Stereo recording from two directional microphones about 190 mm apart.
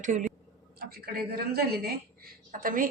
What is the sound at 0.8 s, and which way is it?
A man's voice, 55° right (ahead or behind).